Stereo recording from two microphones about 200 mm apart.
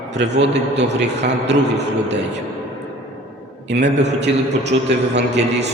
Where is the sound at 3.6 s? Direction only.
60° right (ahead or behind).